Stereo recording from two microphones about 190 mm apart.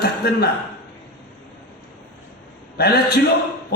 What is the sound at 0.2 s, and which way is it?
Speech, 55° left (ahead or behind).